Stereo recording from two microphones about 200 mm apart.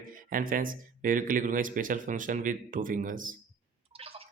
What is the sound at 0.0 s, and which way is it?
Speech, 45° right (ahead or behind).